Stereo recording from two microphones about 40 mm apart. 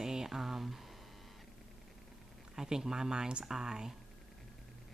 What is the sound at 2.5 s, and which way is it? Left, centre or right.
Speech, centre.